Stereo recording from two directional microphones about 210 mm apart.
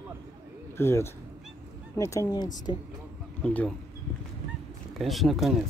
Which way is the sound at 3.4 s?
5° left (ahead or behind).